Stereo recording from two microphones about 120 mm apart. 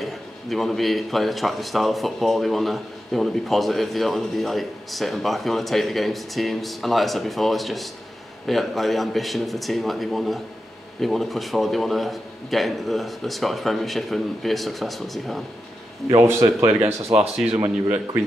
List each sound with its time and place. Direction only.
0.0 s a man's voice: centre (ahead or behind)
16.2 s speech: 25° right (ahead or behind)